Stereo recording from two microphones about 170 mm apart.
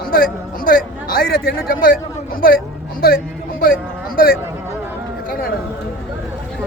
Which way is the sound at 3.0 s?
60° left (ahead or behind).